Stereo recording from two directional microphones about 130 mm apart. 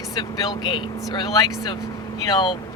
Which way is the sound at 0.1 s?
30° left (ahead or behind).